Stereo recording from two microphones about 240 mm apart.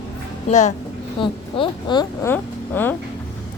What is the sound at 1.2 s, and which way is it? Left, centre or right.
Speech, centre.